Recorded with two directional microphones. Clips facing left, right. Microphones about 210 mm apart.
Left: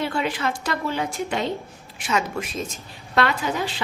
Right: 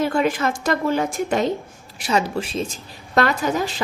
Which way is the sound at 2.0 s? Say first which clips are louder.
Right 4 dB; 35° right (ahead or behind).